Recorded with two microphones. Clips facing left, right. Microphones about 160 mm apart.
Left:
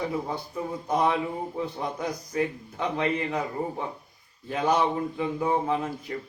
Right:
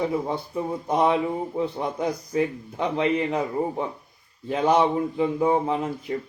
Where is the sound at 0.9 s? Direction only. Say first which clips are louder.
Right 3 dB; 25° right (ahead or behind).